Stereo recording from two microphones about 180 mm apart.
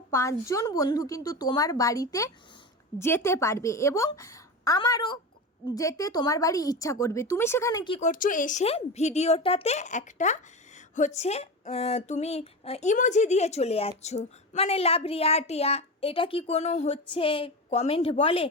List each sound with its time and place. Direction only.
0.1 s a woman's voice: 15° left (ahead or behind)
7.9 s a woman's voice: 45° left (ahead or behind)